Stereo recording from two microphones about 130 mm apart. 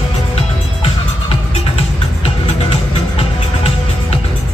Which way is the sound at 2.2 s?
50° left (ahead or behind).